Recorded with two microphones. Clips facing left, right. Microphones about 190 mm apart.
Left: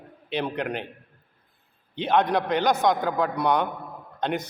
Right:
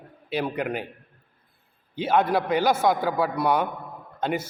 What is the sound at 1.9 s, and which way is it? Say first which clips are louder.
A man's voice: even; 5° right (ahead or behind).